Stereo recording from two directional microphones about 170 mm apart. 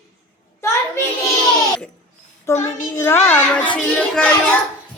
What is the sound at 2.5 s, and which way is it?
Child singing, 15° left (ahead or behind).